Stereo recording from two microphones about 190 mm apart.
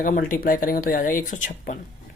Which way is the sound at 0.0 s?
45° left (ahead or behind).